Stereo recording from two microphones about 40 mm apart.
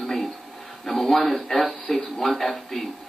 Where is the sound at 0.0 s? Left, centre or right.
Centre.